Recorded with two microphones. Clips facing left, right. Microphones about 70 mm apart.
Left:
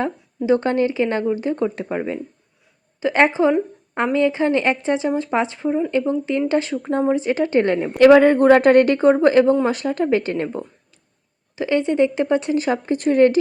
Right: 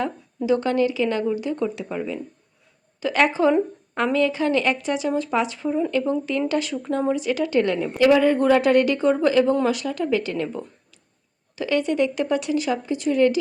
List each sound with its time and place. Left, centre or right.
0.4 s speech: left
3.0 s speech: left
7.9 s speech: left
11.5 s speech: left